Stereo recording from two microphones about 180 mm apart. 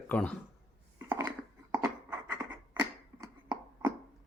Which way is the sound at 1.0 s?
25° right (ahead or behind).